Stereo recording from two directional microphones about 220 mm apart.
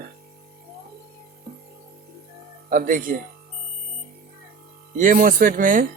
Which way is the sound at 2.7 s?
40° right (ahead or behind).